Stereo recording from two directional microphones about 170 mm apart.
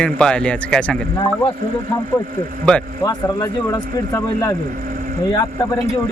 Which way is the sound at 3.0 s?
20° left (ahead or behind).